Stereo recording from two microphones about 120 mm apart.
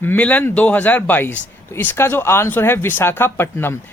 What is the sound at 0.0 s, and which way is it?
Speech, 15° left (ahead or behind).